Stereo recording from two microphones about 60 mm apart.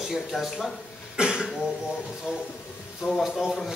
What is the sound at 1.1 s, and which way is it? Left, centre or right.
Speech, centre.